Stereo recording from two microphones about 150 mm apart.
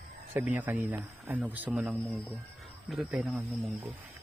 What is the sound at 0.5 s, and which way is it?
Speech, 10° right (ahead or behind).